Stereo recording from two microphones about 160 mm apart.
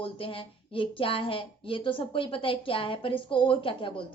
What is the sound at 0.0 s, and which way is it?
Speech, 35° left (ahead or behind).